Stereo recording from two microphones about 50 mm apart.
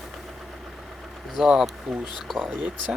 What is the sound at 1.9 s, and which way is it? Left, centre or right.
Speech, centre.